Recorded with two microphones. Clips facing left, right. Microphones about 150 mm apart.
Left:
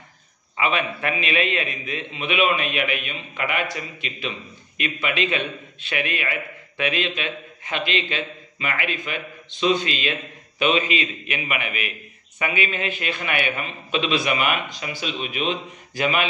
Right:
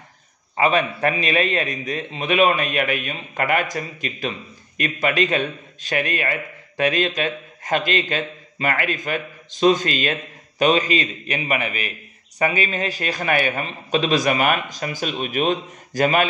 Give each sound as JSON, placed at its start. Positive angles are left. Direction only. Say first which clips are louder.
{"t": 0.6, "sound": "a man's voice", "louder": "right 5 dB", "side_deg": -40}